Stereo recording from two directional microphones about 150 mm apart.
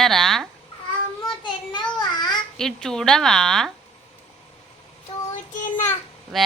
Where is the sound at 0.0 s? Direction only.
Centre (ahead or behind).